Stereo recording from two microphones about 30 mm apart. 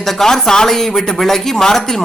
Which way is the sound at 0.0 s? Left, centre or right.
Centre.